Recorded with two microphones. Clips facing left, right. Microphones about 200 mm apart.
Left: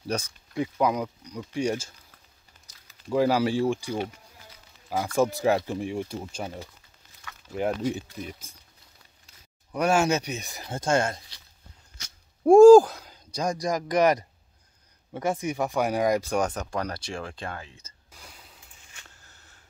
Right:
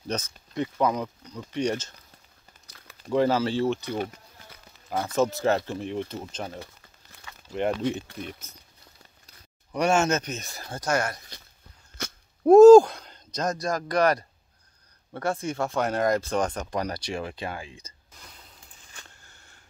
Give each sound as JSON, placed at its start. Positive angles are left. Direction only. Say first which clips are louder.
{"t": 0.1, "sound": "speech", "louder": "left 1 dB", "side_deg": 10}
{"t": 3.1, "sound": "speech", "louder": "even", "side_deg": 10}
{"t": 9.7, "sound": "speech", "louder": "even", "side_deg": 5}
{"t": 12.0, "sound": "wail", "louder": "right 15 dB", "side_deg": -55}
{"t": 12.4, "sound": "speech", "louder": "right 1 dB", "side_deg": 10}
{"t": 16.8, "sound": "speech", "louder": "right 2 dB", "side_deg": -5}
{"t": 18.1, "sound": "a sound", "louder": "left 2 dB", "side_deg": 10}